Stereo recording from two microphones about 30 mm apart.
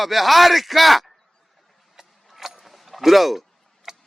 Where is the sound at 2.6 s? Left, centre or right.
Centre.